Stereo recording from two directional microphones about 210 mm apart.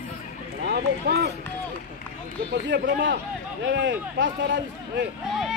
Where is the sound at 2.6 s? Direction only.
55° right (ahead or behind).